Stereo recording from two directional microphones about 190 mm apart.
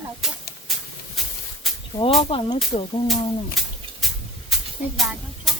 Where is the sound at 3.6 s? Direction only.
Centre (ahead or behind).